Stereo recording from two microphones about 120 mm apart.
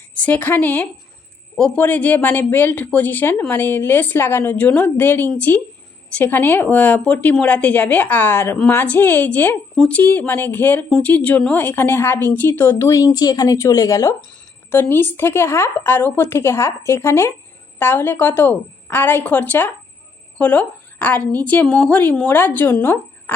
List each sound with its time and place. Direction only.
0.3 s a woman's voice: 15° left (ahead or behind)
9.7 s speech: 5° left (ahead or behind)
10.0 s a woman's voice: 15° left (ahead or behind)
13.1 s a woman's voice: 30° left (ahead or behind); by 23.3 s 15° left (ahead or behind)